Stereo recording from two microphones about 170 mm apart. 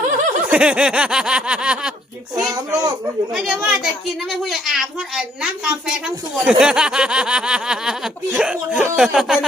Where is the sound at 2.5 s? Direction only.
20° right (ahead or behind).